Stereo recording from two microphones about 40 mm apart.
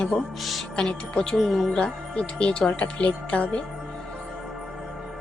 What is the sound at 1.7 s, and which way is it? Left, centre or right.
Speech, left.